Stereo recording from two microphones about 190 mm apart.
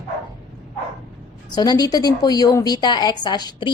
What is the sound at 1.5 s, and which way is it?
A woman's voice, 20° left (ahead or behind).